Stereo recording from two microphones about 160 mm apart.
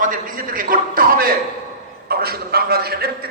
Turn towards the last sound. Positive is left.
turn(degrees=-75)  # may be behind; listen again after turning